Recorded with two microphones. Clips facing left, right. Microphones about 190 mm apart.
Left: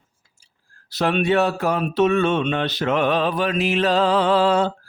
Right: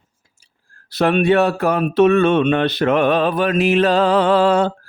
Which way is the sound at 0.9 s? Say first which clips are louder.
Right 4 dB; 55° right (ahead or behind).